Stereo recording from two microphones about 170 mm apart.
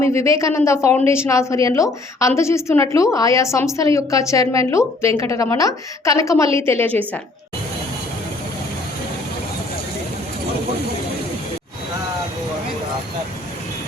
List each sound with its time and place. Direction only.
0.0 s a woman's voice: 15° left (ahead or behind)